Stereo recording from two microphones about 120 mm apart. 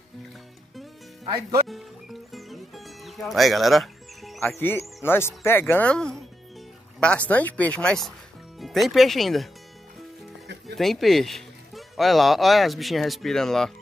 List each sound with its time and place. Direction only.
1.2 s speech: 30° right (ahead or behind)
1.7 s music: centre (ahead or behind)
4.6 s speech: 20° left (ahead or behind); by 9.5 s centre (ahead or behind)
10.8 s speech: centre (ahead or behind)